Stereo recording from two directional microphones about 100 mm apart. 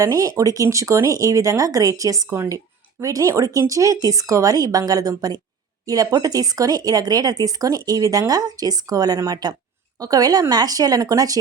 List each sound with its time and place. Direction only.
0.0 s speech: 35° right (ahead or behind)